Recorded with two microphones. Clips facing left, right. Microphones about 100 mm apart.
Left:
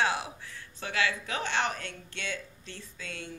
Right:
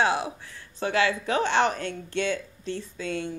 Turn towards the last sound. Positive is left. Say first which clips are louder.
# right 12 dB
turn(degrees=-25)  # may be behind; listen again after turning